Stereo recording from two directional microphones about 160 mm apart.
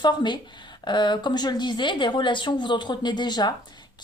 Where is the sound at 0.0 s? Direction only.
30° left (ahead or behind).